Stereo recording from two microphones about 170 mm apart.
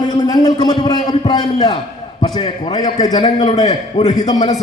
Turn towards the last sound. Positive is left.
turn(degrees=20)  # may be behind; listen again after turning